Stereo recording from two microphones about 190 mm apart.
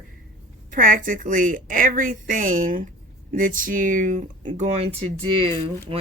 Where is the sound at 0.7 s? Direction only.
45° right (ahead or behind).